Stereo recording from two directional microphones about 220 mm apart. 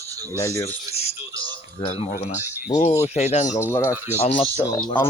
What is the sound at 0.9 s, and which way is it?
Radio, 30° left (ahead or behind).